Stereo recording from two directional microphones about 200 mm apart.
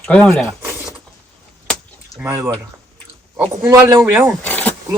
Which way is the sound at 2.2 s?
15° right (ahead or behind).